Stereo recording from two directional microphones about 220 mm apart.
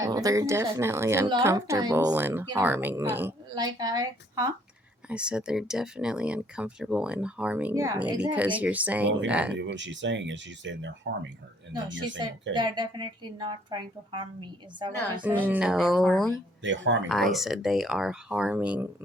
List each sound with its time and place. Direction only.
0.0 s a woman's voice: 15° right (ahead or behind)
5.0 s a woman's voice: 5° right (ahead or behind)
9.6 s speech: 55° right (ahead or behind)
11.7 s a woman's voice: 20° right (ahead or behind)
15.4 s speech: 5° right (ahead or behind)
16.6 s speech: 55° right (ahead or behind)
17.1 s speech: centre (ahead or behind)